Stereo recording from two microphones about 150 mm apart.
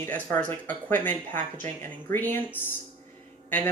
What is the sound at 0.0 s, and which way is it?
Speech, 10° left (ahead or behind).